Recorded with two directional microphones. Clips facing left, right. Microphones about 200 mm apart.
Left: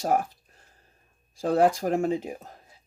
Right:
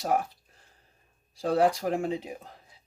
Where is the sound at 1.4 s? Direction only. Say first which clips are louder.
Left 2 dB; 50° left (ahead or behind).